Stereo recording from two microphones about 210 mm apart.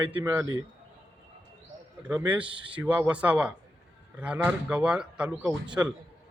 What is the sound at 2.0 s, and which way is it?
Speech, 5° right (ahead or behind).